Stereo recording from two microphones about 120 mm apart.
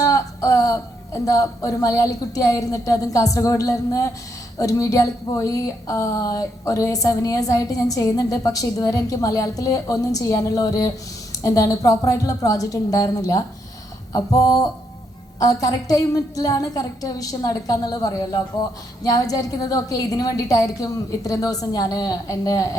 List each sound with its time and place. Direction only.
0.0 s a woman's voice: 30° left (ahead or behind)